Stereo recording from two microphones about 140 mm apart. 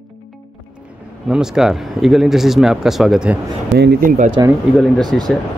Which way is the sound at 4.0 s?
70° right (ahead or behind).